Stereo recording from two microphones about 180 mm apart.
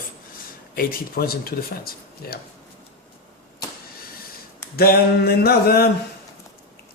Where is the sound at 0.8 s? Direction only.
55° left (ahead or behind).